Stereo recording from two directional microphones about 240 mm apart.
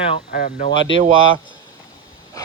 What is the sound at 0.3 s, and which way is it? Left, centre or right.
Speech, left.